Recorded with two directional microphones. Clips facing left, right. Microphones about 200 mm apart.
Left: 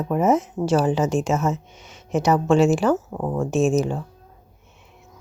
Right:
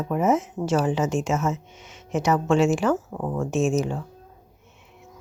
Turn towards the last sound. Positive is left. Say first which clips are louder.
# left 3 dB
turn(degrees=35)  # may be behind; listen again after turning